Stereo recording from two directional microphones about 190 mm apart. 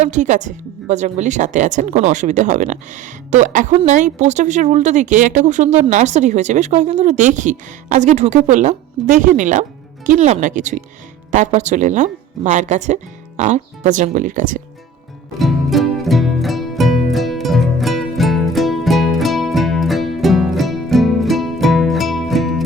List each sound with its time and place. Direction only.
0.0 s speech: 40° right (ahead or behind)
15.4 s music: centre (ahead or behind)